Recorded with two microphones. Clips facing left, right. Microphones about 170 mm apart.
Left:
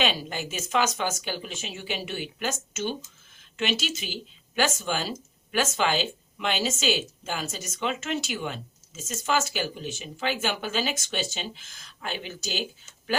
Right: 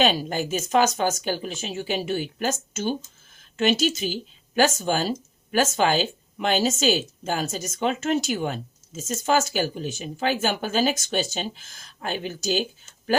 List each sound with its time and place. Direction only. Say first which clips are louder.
0.0 s speech: right 6 dB; 45° right (ahead or behind)